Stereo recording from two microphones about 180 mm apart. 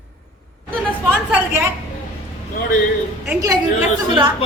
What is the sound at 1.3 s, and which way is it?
Speech, 15° right (ahead or behind).